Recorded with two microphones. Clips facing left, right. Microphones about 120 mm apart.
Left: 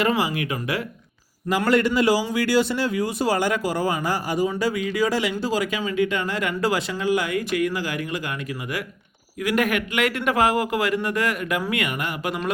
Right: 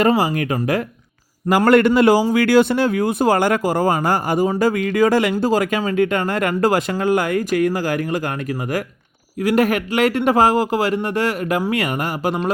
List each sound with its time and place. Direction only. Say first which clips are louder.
0.0 s speech: right 6 dB; 40° right (ahead or behind)
1.5 s a man's voice: right 7 dB; 60° right (ahead or behind); by 8.8 s 45° right (ahead or behind)
9.4 s speech: right 5 dB; 35° right (ahead or behind)